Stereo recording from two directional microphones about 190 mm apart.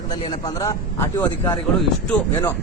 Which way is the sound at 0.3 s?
20° left (ahead or behind).